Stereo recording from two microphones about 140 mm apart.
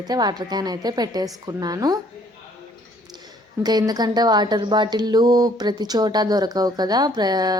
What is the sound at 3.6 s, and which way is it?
A woman's voice, 30° right (ahead or behind).